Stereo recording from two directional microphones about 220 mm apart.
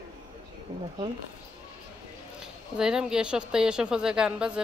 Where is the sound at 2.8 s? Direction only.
5° right (ahead or behind).